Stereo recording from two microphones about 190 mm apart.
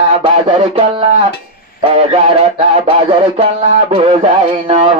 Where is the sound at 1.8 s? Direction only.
30° right (ahead or behind).